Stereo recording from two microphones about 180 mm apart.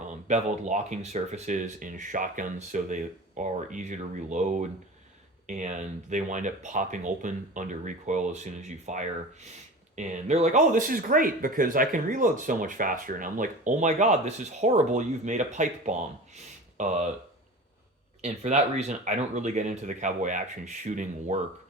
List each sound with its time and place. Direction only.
0.1 s speech: 40° right (ahead or behind)
18.2 s speech: 40° right (ahead or behind)